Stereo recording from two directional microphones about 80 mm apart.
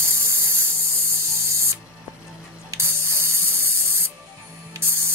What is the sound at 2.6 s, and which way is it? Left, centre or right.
Spray, right.